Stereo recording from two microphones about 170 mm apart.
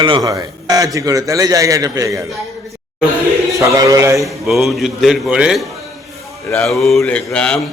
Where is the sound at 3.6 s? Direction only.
20° right (ahead or behind).